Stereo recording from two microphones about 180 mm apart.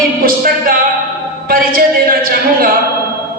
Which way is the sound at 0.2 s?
50° right (ahead or behind).